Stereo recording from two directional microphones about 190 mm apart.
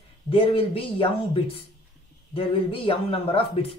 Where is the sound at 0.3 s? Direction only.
30° left (ahead or behind).